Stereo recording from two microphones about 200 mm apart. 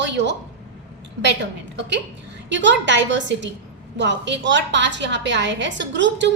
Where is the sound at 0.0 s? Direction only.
60° right (ahead or behind).